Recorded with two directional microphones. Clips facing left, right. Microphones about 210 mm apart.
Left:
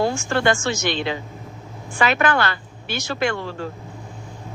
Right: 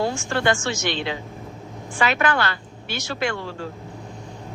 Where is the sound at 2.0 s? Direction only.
50° left (ahead or behind).